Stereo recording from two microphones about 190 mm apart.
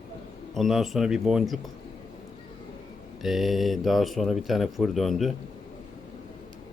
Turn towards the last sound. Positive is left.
turn(degrees=0)  # may be behind; listen again after turning